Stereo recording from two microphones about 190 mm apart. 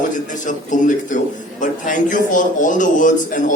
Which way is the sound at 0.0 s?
40° left (ahead or behind).